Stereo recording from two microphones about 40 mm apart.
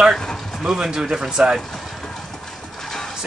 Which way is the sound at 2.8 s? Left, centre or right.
Centre.